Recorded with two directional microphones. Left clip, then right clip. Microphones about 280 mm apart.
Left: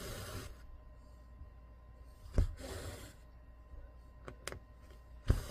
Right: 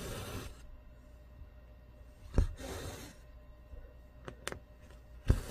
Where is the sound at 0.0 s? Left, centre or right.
Centre.